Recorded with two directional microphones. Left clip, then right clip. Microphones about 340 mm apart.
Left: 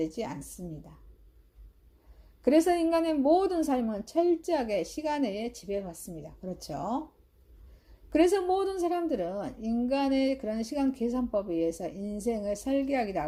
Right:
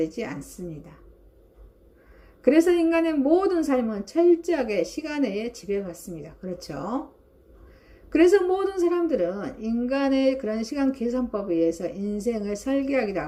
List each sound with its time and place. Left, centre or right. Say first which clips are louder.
0.0 s a woman's voice: right 5 dB; left
2.4 s a woman's voice: right 5 dB; left
8.1 s a woman's voice: right 6 dB; left